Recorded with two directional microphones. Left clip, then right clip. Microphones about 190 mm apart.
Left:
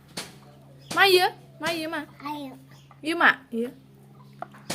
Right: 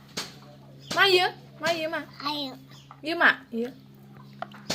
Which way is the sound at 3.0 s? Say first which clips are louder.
Left 1 dB; 20° left (ahead or behind).